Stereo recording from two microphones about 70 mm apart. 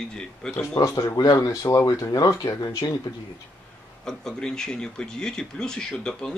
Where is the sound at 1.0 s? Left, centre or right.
Left.